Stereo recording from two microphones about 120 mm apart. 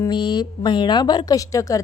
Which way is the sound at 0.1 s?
35° left (ahead or behind).